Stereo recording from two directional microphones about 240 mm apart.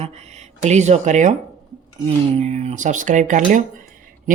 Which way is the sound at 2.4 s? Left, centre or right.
Right.